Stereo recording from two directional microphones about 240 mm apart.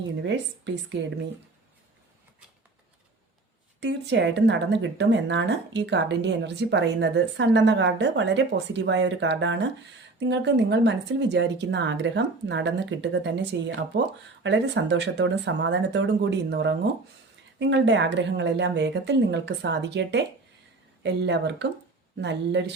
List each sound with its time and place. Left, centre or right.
0.2 s speech: right
3.8 s speech: right